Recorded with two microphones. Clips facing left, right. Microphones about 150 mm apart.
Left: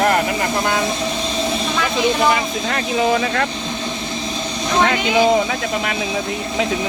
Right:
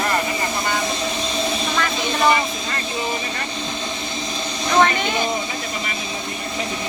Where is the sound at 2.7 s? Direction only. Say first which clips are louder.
Left 11 dB; 90° left.